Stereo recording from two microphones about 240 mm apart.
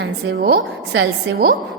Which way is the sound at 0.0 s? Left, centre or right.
Right.